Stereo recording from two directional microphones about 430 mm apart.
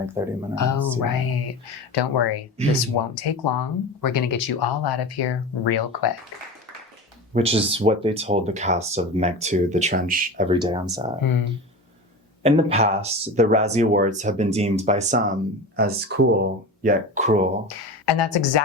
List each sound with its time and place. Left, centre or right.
0.2 s speech: centre
0.5 s speech: left
1.9 s speech: left
2.9 s speech: left
3.4 s speech: left
7.3 s speech: centre
11.2 s speech: left
12.4 s speech: centre
17.7 s speech: left